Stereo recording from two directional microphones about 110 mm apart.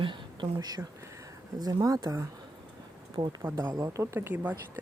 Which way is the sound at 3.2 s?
40° right (ahead or behind).